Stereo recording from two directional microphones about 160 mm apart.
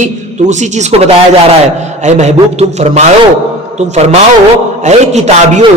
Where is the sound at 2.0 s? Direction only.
45° right (ahead or behind).